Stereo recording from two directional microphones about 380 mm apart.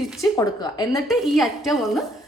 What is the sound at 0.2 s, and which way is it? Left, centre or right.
A woman's voice, centre.